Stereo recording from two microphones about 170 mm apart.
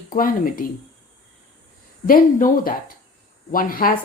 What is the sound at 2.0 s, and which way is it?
Speech, 55° left (ahead or behind).